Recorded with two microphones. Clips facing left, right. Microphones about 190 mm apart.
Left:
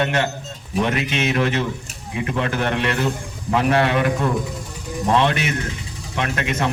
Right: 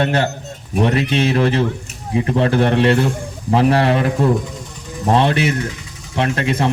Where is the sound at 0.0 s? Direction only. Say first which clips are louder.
Right 3 dB; 35° right (ahead or behind).